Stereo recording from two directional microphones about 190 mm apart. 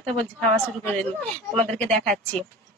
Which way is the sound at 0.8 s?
5° left (ahead or behind).